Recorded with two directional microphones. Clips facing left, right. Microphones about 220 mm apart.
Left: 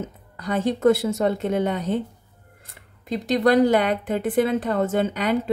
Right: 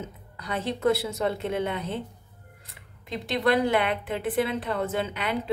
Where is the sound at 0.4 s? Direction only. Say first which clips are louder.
Left 7 dB; 45° left (ahead or behind).